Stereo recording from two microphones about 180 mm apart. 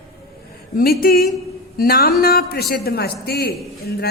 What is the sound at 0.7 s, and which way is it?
A woman's voice, 55° left (ahead or behind).